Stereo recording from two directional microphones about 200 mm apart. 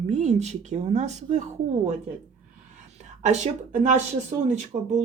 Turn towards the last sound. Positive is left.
turn(degrees=-35)  # may be behind; listen again after turning